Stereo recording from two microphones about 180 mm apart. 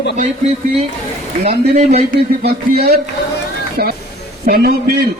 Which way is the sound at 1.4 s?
40° right (ahead or behind).